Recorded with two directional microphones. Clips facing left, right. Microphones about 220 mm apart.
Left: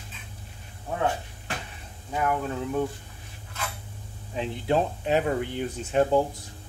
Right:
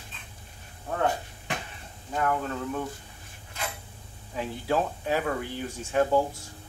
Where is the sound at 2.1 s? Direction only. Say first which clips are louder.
Left 1 dB; 10° left (ahead or behind).